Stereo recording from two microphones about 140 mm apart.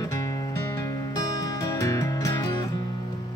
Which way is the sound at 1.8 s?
25° left (ahead or behind).